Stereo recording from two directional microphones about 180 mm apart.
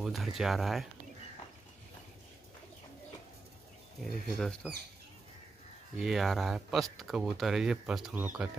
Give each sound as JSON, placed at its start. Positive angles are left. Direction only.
{"t": 0.0, "sound": "speech", "side_deg": 0}
{"t": 4.0, "sound": "speech", "side_deg": 0}
{"t": 5.9, "sound": "speech", "side_deg": 0}